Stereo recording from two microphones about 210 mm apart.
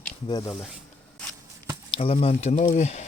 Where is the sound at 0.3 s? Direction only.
20° left (ahead or behind).